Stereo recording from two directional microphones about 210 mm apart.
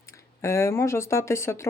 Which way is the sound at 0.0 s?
15° left (ahead or behind).